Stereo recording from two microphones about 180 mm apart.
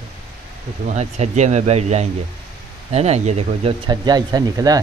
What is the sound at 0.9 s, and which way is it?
Speech, 40° right (ahead or behind).